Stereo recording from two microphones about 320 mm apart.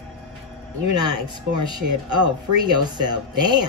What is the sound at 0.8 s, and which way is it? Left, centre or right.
Speech, right.